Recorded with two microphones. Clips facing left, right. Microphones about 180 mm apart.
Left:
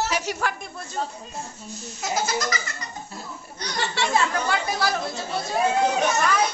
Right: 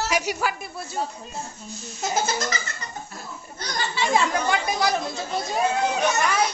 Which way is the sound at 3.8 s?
75° left (ahead or behind).